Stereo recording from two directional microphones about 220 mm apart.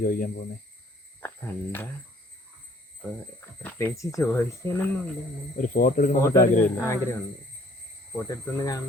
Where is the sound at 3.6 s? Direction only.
10° left (ahead or behind).